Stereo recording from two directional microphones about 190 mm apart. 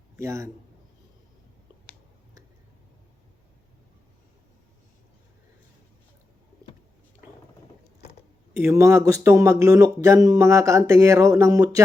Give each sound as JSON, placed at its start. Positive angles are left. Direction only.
{"t": 0.2, "sound": "speech", "side_deg": -15}
{"t": 8.5, "sound": "speech", "side_deg": -15}